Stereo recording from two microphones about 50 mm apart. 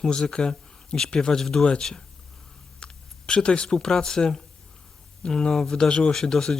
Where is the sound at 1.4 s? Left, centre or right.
Centre.